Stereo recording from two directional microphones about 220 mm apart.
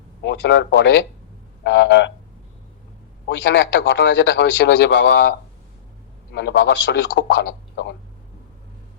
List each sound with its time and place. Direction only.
0.2 s a man's voice: 50° left (ahead or behind)
3.2 s a man's voice: 55° left (ahead or behind)
6.3 s a man's voice: 55° left (ahead or behind)